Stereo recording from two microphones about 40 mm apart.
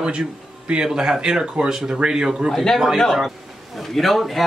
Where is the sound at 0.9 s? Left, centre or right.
Centre.